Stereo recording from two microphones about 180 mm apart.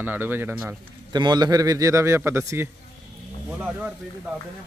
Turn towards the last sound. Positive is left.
turn(degrees=-5)  # may be behind; listen again after turning